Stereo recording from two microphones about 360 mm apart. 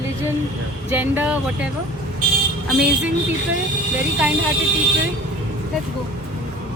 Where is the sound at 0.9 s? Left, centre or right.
Centre.